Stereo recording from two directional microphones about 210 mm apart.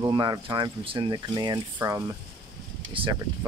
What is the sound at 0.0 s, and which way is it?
Speech, 20° right (ahead or behind).